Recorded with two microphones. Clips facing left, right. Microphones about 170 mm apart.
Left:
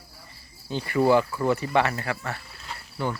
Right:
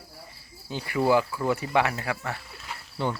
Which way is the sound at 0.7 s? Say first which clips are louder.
Left 2 dB; 10° right (ahead or behind).